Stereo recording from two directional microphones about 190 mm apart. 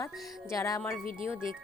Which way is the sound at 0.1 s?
Centre (ahead or behind).